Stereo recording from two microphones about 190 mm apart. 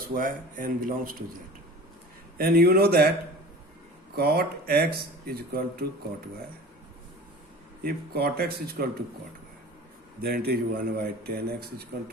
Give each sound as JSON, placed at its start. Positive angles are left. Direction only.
{"t": 0.0, "sound": "speech", "side_deg": -45}
{"t": 2.4, "sound": "speech", "side_deg": -50}
{"t": 4.1, "sound": "speech", "side_deg": -55}
{"t": 7.8, "sound": "speech", "side_deg": -55}
{"t": 10.2, "sound": "speech", "side_deg": -55}